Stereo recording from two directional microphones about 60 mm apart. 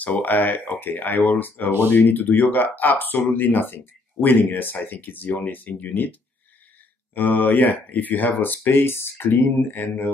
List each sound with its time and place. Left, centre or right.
0.0 s speech: left
7.2 s speech: left